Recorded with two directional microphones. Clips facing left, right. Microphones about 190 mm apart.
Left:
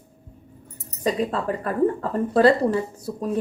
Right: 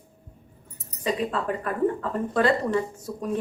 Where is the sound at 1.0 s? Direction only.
40° left (ahead or behind).